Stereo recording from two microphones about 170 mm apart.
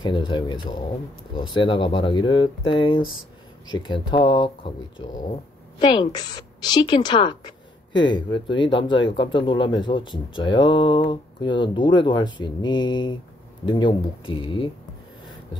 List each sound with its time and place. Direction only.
0.0 s speech: 30° left (ahead or behind)